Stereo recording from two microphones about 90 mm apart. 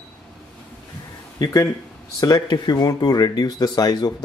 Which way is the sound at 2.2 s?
50° left (ahead or behind).